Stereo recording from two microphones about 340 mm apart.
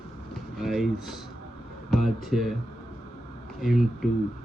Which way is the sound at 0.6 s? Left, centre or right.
Centre.